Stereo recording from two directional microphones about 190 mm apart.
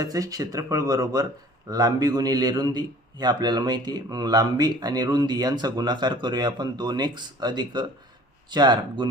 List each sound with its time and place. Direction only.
0.0 s a man's voice: 20° right (ahead or behind)